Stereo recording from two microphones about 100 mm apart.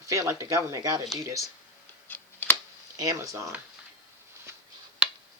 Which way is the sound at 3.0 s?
35° right (ahead or behind).